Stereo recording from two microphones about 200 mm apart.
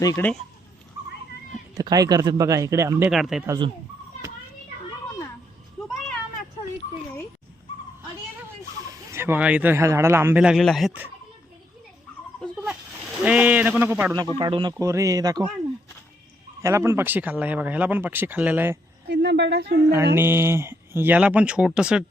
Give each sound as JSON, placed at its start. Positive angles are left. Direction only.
{"t": 0.0, "sound": "speech", "side_deg": 15}
{"t": 1.7, "sound": "speech", "side_deg": -20}
{"t": 3.1, "sound": "speech", "side_deg": 0}
{"t": 3.4, "sound": "speech", "side_deg": -15}
{"t": 8.9, "sound": "speech", "side_deg": -10}
{"t": 13.2, "sound": "speech", "side_deg": -5}
{"t": 16.6, "sound": "speech", "side_deg": -15}
{"t": 19.0, "sound": "a woman's voice", "side_deg": -60}
{"t": 20.1, "sound": "speech", "side_deg": -10}